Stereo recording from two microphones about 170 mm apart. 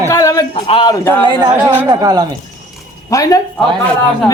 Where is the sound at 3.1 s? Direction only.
20° left (ahead or behind).